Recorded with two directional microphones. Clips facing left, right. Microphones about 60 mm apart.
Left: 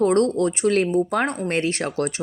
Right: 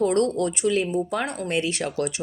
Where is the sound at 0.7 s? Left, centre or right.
Left.